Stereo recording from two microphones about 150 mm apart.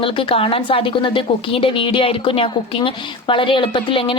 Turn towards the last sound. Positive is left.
turn(degrees=35)  # may be behind; listen again after turning